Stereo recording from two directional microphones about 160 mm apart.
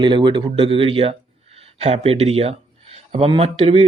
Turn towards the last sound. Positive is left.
turn(degrees=-40)  # may be behind; listen again after turning